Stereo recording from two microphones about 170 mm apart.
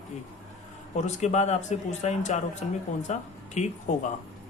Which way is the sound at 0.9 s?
40° left (ahead or behind).